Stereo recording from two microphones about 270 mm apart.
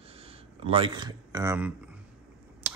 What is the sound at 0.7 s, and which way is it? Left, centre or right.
Speech, centre.